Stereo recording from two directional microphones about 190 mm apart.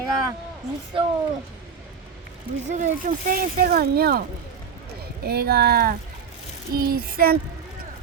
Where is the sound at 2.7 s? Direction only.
40° right (ahead or behind).